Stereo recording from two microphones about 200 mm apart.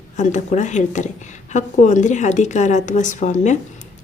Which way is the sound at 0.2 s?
35° left (ahead or behind).